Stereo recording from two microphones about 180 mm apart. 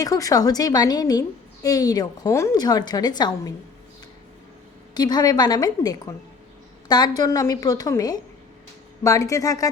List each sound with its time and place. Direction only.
0.0 s a woman's voice: 20° left (ahead or behind)
4.9 s a woman's voice: 20° left (ahead or behind)